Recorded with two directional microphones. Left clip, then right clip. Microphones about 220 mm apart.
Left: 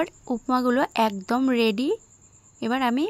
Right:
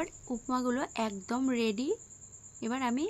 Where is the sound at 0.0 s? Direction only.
40° left (ahead or behind).